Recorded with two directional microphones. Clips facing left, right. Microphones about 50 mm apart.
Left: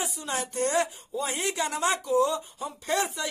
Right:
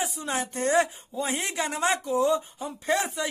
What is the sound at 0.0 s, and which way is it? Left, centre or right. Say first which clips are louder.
Speech: right 2 dB; right.